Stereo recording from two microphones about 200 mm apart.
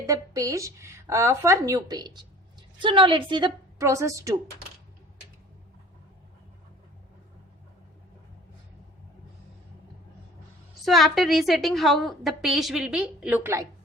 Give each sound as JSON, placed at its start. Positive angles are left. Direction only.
{"t": 0.0, "sound": "a woman's voice", "side_deg": -15}
{"t": 10.8, "sound": "a woman's voice", "side_deg": 0}